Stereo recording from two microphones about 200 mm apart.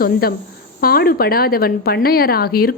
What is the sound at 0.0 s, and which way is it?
A woman's voice, 50° left (ahead or behind).